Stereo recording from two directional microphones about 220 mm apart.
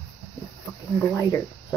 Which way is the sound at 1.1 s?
15° left (ahead or behind).